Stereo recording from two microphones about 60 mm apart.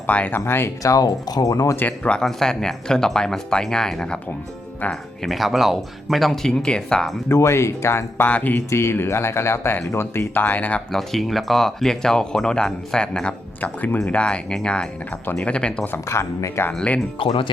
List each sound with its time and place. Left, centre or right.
0.1 s speech: left
0.8 s speech: left
1.9 s speech: centre
7.3 s speech: left
8.3 s speech: left
8.7 s speech: left
10.3 s speech: left
10.9 s speech: centre
13.6 s speech: left
14.0 s speech: centre
16.0 s speech: left
16.7 s speech: centre